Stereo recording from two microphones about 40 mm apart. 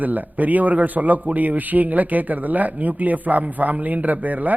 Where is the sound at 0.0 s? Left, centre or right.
Right.